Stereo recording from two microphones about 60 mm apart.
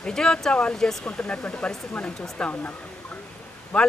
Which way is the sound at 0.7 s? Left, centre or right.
Centre.